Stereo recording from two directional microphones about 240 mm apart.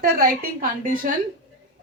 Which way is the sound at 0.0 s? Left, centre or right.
Right.